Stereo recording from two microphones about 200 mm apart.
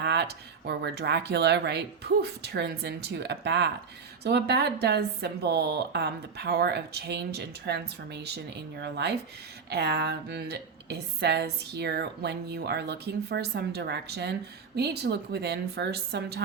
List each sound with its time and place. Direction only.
0.0 s a woman's voice: 55° right (ahead or behind)